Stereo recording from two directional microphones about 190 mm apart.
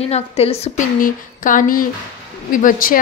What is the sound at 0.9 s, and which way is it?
A woman's voice, 45° left (ahead or behind).